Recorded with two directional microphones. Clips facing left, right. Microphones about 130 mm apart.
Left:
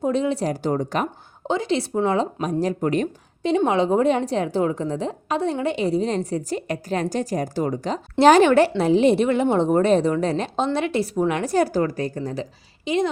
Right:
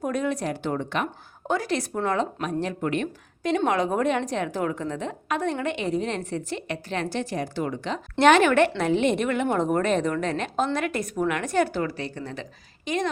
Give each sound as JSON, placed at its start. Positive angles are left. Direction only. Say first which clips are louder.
{"t": 0.0, "sound": "a woman's voice", "louder": "left 5 dB", "side_deg": 25}
{"t": 1.5, "sound": "a woman's voice", "louder": "left 3 dB", "side_deg": 25}
{"t": 3.5, "sound": "a woman's voice", "louder": "left 4 dB", "side_deg": 25}